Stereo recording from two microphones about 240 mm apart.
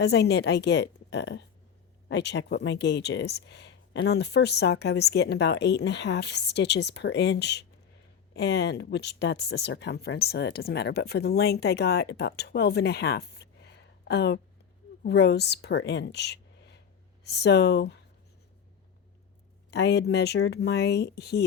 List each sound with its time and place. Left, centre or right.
0.0 s a woman's voice: left
19.7 s speech: left